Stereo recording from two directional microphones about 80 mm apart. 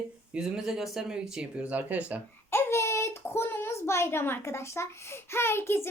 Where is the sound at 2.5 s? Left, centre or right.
Left.